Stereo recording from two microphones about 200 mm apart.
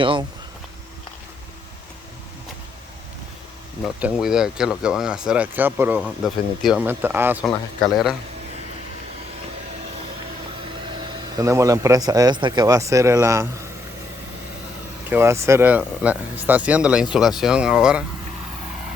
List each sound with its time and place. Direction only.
0.0 s speech: 25° right (ahead or behind)
3.8 s speech: 5° right (ahead or behind)
11.3 s a man's voice: 15° right (ahead or behind)
15.1 s a man's voice: 15° right (ahead or behind)